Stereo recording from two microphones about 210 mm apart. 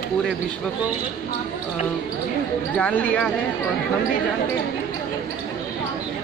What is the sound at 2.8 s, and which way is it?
Speech, 5° left (ahead or behind).